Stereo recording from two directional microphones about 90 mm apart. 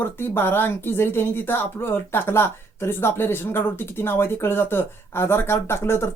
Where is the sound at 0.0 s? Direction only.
25° left (ahead or behind).